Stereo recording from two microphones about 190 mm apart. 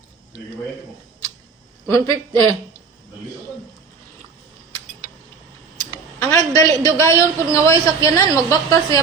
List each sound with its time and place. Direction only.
1.9 s a man's voice: 20° left (ahead or behind)
6.3 s a man's voice: 15° left (ahead or behind)